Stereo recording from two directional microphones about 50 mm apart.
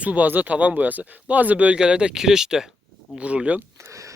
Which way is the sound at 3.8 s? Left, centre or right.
Right.